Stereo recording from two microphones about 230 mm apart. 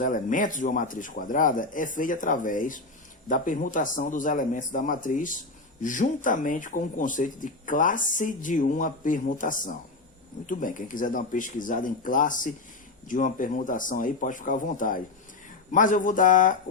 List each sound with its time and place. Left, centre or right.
0.0 s speech: left